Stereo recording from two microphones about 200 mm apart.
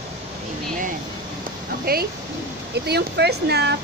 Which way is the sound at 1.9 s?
50° right (ahead or behind).